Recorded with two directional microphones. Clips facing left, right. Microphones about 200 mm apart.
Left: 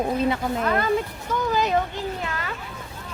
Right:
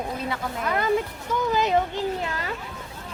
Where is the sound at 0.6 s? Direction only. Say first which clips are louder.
Right 2 dB; 15° right (ahead or behind); by 2.5 s 30° right (ahead or behind).